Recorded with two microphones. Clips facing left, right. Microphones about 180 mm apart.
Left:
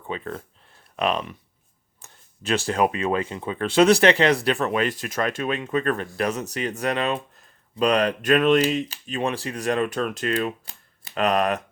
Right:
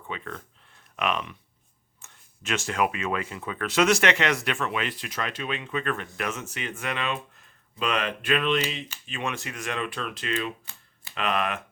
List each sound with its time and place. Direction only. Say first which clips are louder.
0.1 s speech: left 6 dB; 30° left (ahead or behind)